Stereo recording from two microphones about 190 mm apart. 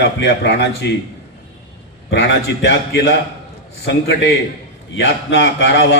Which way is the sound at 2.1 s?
70° left (ahead or behind).